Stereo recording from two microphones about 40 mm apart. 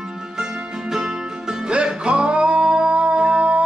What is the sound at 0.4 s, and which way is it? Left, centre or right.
Music, centre.